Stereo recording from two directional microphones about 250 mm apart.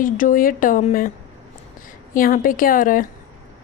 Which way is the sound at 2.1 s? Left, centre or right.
Left.